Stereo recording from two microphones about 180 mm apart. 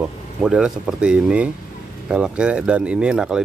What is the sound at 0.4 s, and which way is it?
Speech, 5° right (ahead or behind).